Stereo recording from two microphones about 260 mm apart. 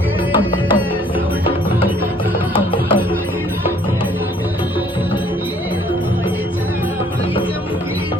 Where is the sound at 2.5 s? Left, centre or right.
Centre.